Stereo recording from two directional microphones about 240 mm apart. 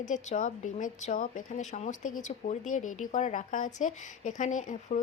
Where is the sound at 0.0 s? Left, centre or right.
Left.